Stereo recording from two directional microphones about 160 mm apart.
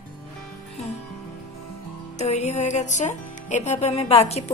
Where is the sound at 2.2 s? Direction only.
45° left (ahead or behind).